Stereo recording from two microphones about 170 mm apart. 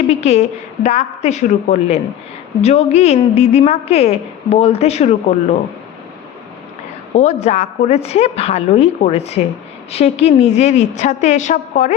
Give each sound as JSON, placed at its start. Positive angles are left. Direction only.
{"t": 0.1, "sound": "a woman's voice", "side_deg": 40}
{"t": 7.1, "sound": "a woman's voice", "side_deg": 45}